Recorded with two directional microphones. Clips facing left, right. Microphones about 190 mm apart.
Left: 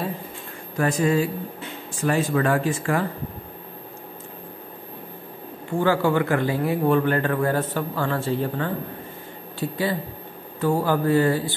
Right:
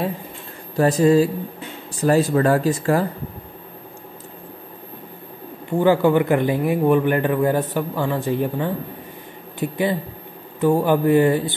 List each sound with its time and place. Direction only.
0.7 s speech: 35° right (ahead or behind)
5.8 s a man's voice: 15° right (ahead or behind)